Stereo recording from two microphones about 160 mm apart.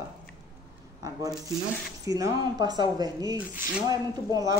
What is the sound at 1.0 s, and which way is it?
Speech, 25° right (ahead or behind).